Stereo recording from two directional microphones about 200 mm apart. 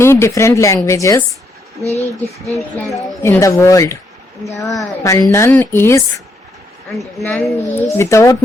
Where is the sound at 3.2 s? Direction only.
15° left (ahead or behind).